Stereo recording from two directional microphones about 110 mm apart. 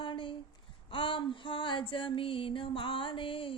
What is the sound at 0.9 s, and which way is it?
Music, 50° left (ahead or behind).